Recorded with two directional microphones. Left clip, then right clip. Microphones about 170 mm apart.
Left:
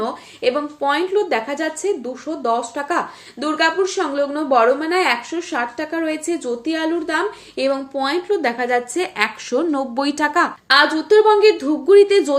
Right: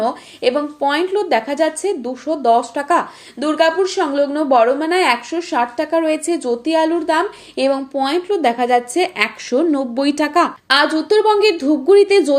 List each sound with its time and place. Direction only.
0.0 s speech: 30° right (ahead or behind); by 10.5 s 15° right (ahead or behind)
10.7 s speech: 30° right (ahead or behind)